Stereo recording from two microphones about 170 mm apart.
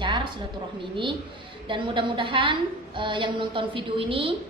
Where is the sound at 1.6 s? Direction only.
30° right (ahead or behind).